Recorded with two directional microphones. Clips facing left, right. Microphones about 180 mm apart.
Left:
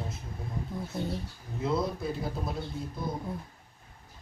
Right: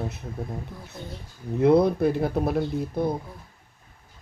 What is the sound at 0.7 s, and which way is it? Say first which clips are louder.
Speech: left 7 dB; 20° left (ahead or behind).